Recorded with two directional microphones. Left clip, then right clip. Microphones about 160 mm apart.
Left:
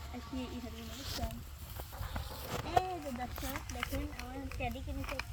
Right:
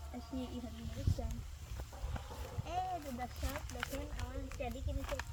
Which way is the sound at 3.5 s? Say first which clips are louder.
Left 3 dB; 25° left (ahead or behind).